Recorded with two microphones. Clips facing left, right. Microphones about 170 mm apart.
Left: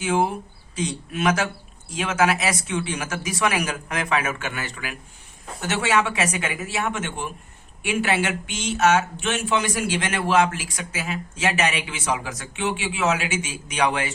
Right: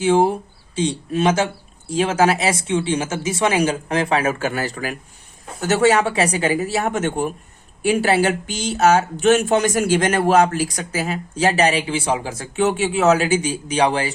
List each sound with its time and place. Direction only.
0.0 s speech: 30° right (ahead or behind)